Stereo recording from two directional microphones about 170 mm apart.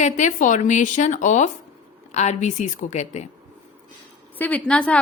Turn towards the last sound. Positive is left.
turn(degrees=5)  # may be behind; listen again after turning